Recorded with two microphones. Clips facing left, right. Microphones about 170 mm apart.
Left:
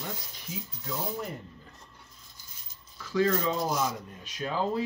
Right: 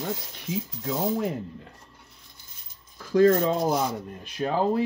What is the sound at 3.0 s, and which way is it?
Speech, 50° right (ahead or behind).